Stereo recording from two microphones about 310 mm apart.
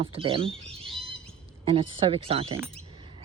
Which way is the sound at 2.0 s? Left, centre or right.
Centre.